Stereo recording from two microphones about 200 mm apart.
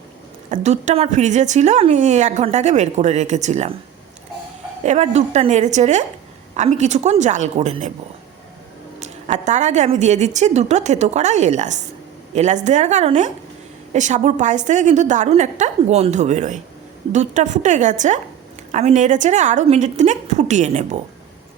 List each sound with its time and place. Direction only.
0.5 s a woman's voice: 35° right (ahead or behind)
4.8 s a woman's voice: 35° right (ahead or behind)
9.0 s a woman's voice: 35° right (ahead or behind)